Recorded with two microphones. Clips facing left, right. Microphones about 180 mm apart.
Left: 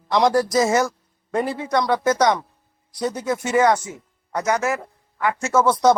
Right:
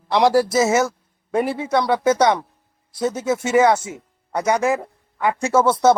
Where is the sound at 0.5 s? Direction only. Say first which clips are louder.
Right 1 dB; 5° right (ahead or behind).